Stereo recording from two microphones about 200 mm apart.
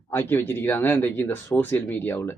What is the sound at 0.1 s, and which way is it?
Speech, 10° left (ahead or behind).